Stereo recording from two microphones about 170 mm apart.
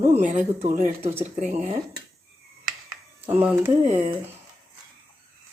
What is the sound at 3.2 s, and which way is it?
Speech, 10° right (ahead or behind).